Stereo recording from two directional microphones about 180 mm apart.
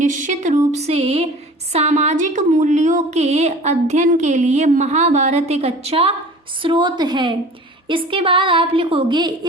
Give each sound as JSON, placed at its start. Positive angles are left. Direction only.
{"t": 0.0, "sound": "a woman's voice", "side_deg": -45}